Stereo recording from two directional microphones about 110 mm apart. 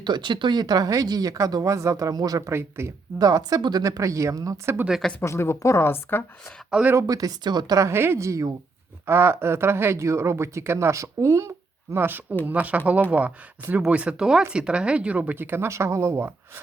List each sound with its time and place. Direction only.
0.0 s speech: 45° right (ahead or behind)
2.5 s speech: 25° right (ahead or behind)
3.2 s speech: 35° right (ahead or behind)
4.9 s speech: centre (ahead or behind)
5.2 s a woman's voice: 25° left (ahead or behind)
6.7 s speech: 5° right (ahead or behind)
6.9 s speech: 35° right (ahead or behind)